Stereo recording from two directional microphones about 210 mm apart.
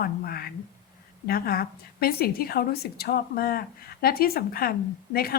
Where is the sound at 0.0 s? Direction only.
45° left (ahead or behind).